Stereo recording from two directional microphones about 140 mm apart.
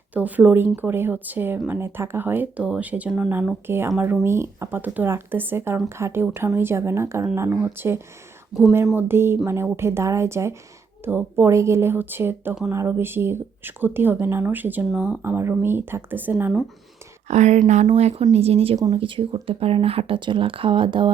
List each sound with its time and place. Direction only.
0.1 s a woman's voice: 10° right (ahead or behind)
17.2 s speech: 55° right (ahead or behind); by 21.1 s 35° right (ahead or behind)